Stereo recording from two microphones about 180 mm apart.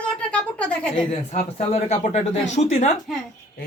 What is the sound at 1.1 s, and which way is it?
Speech, 35° left (ahead or behind).